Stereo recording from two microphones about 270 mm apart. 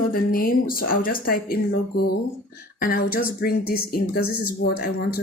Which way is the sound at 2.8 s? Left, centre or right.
Left.